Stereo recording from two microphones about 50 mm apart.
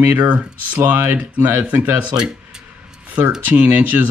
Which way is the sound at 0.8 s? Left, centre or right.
Right.